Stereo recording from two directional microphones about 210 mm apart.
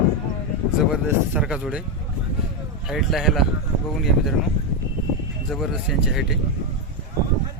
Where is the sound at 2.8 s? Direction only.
Centre (ahead or behind).